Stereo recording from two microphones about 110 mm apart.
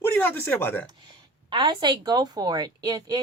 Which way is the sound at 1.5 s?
45° right (ahead or behind).